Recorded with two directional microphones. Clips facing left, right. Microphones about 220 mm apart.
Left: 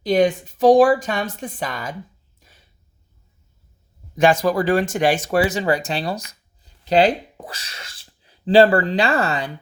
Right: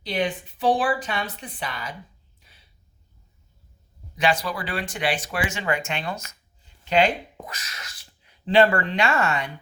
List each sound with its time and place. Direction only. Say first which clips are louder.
0.0 s speech: left 9 dB; 45° left (ahead or behind)
2.4 s a sound: left 6 dB; 45° left (ahead or behind)
4.1 s speech: left 8 dB; 45° left (ahead or behind)